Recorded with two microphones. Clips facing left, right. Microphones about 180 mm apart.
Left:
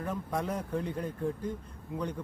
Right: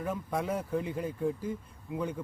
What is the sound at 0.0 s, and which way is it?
Speech, 5° right (ahead or behind).